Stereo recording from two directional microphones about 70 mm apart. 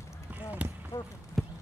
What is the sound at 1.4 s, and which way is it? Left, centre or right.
Basketball bounce, centre.